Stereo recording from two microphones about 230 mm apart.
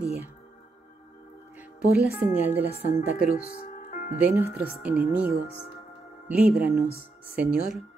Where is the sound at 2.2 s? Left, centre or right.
Centre.